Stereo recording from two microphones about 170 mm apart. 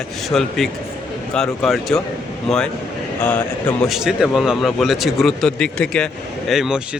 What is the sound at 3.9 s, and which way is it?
Speech, centre (ahead or behind).